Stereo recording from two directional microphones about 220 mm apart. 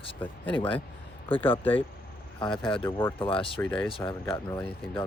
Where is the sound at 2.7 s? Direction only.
10° left (ahead or behind).